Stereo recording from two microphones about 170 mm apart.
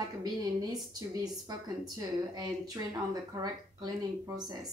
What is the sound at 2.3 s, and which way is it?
Speech, 25° right (ahead or behind).